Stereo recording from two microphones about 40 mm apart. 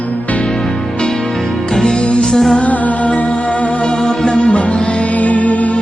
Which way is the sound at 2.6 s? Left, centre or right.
Left.